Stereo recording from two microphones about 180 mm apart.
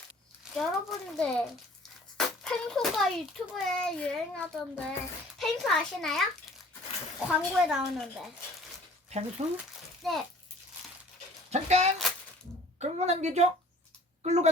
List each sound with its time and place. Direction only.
0.5 s speech: centre (ahead or behind)
7.3 s speech: centre (ahead or behind)
9.4 s a woman's voice: 40° right (ahead or behind)
10.0 s speech: centre (ahead or behind)
11.5 s a woman's voice: 40° right (ahead or behind)